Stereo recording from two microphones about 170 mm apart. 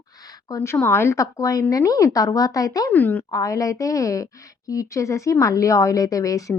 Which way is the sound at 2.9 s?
10° left (ahead or behind).